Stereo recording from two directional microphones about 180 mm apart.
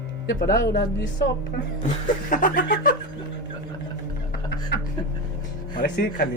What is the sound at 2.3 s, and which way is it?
Speech, 50° left (ahead or behind).